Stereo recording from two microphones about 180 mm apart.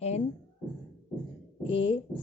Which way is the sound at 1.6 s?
30° left (ahead or behind).